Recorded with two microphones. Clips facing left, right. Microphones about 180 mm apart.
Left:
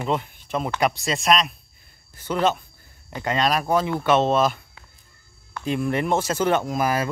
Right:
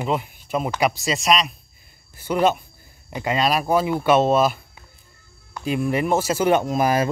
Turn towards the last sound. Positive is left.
turn(degrees=-25)  # may be behind; listen again after turning